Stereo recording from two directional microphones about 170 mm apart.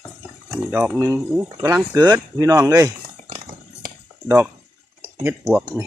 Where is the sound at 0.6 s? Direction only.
10° right (ahead or behind).